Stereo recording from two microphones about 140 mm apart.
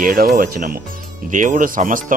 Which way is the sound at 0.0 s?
90° right.